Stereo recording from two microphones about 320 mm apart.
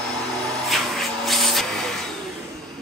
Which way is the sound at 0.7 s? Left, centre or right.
Centre.